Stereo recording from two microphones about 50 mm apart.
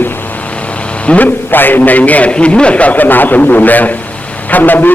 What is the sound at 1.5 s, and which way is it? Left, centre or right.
A man's voice, left.